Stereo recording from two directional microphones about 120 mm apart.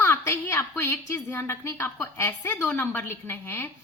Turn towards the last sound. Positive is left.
turn(degrees=15)  # may be behind; listen again after turning